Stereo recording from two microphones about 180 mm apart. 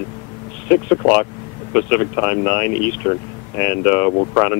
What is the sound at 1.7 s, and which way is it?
Speech, 15° left (ahead or behind).